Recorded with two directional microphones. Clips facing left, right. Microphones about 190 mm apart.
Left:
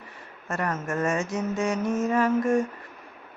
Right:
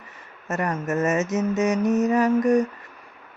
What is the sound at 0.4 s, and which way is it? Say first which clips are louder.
Mantra: right 3 dB; 20° right (ahead or behind).